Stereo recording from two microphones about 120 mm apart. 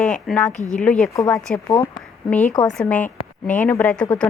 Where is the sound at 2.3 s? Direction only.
10° left (ahead or behind).